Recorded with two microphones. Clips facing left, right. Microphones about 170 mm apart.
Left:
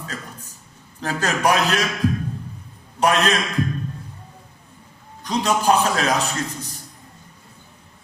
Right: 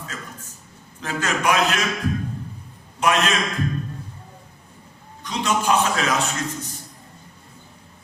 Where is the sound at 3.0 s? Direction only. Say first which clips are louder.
Left 2 dB; 35° left (ahead or behind).